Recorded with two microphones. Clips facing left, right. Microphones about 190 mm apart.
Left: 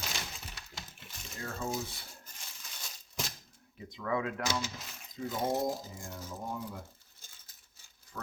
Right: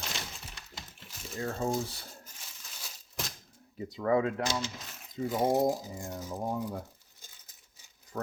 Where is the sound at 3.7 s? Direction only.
35° right (ahead or behind).